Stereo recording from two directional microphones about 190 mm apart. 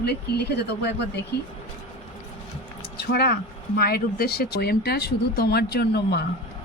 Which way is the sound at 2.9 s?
55° left (ahead or behind).